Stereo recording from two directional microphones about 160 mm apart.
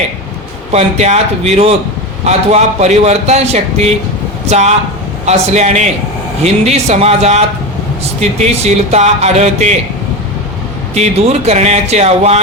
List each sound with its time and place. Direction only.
0.7 s a man's voice: 45° right (ahead or behind)
10.9 s a man's voice: 45° right (ahead or behind)